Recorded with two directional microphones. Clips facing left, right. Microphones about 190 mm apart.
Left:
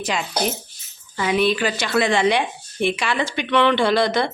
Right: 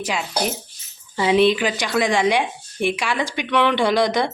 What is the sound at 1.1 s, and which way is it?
Speech, 25° right (ahead or behind).